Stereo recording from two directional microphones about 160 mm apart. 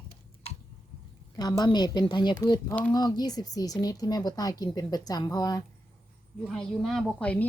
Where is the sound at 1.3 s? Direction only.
25° left (ahead or behind).